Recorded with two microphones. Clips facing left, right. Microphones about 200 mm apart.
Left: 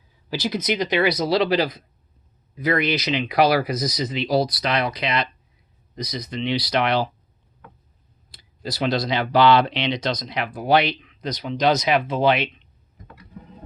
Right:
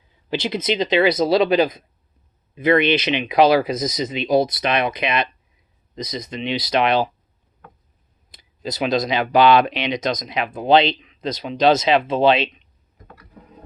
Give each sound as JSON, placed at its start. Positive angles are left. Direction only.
{"t": 0.3, "sound": "speech", "side_deg": -25}
{"t": 8.3, "sound": "speech", "side_deg": -20}